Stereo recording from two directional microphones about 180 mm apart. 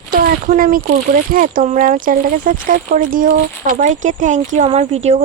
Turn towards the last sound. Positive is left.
turn(degrees=-35)  # may be behind; listen again after turning